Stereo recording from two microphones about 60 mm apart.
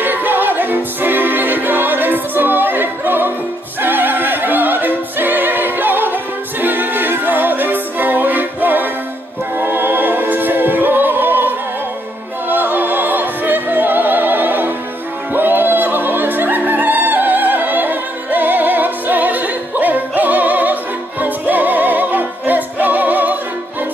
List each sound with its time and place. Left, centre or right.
0.0 s music: right
3.8 s opera: right
6.6 s music: right
9.6 s opera: right
21.2 s music: right